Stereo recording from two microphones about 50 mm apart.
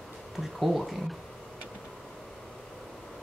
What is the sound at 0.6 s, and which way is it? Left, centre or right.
Speech, centre.